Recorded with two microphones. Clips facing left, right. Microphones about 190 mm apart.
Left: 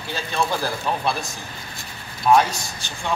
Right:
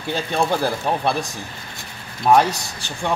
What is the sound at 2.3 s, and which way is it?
Speech, 45° right (ahead or behind).